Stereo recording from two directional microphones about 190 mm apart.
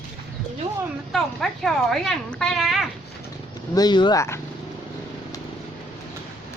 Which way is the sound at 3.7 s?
20° left (ahead or behind).